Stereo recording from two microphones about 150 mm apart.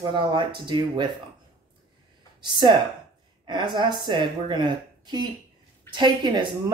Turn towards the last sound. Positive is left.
turn(degrees=-30)  # may be behind; listen again after turning